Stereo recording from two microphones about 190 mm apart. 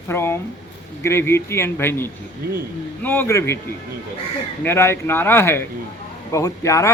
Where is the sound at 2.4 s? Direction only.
50° right (ahead or behind).